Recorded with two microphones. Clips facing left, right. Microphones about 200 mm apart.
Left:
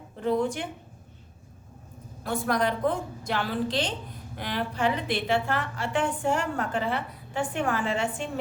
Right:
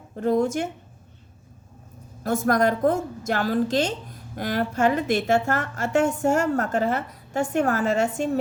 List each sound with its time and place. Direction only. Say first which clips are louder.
0.2 s a woman's voice: right 4 dB; 45° right (ahead or behind)
2.2 s a woman's voice: right 5 dB; 45° right (ahead or behind)